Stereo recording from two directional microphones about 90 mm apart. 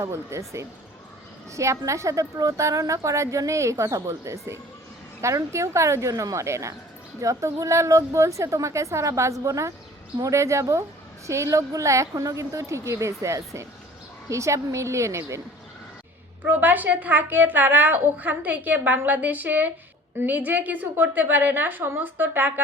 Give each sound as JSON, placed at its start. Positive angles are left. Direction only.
{"t": 0.0, "sound": "a woman's voice", "side_deg": -35}
{"t": 16.5, "sound": "a woman's voice", "side_deg": -20}